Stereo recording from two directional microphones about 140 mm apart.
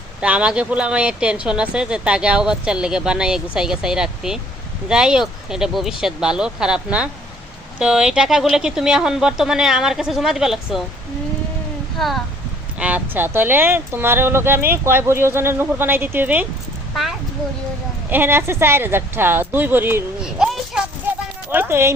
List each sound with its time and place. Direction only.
0.2 s speech: 10° right (ahead or behind)
11.9 s speech: centre (ahead or behind)
12.8 s speech: 10° right (ahead or behind)
16.9 s speech: centre (ahead or behind)
18.1 s speech: 15° right (ahead or behind)
20.2 s a sound: 5° right (ahead or behind)
21.5 s speech: 15° right (ahead or behind)